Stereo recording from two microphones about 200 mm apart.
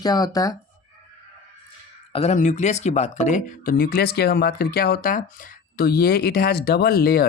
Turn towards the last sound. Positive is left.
turn(degrees=50)  # may be behind; listen again after turning